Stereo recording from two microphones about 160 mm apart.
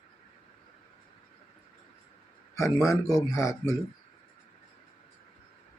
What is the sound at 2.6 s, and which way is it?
Speech, 20° left (ahead or behind).